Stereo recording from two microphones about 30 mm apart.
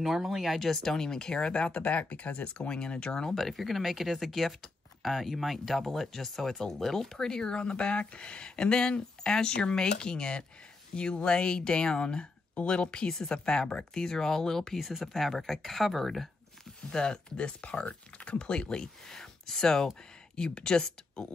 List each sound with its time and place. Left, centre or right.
0.0 s speech: centre
0.6 s speech: centre; by 1.8 s left
1.9 s speech: left
2.9 s speech: left
3.3 s speech: centre; by 7.7 s left
7.7 s speech: left; by 16.3 s centre
16.9 s speech: left
17.4 s speech: left
19.1 s speech: centre
20.3 s speech: left